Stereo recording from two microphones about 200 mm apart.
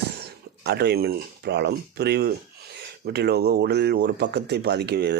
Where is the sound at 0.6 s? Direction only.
55° right (ahead or behind).